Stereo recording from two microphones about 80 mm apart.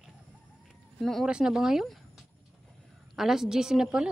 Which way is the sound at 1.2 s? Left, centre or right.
Centre.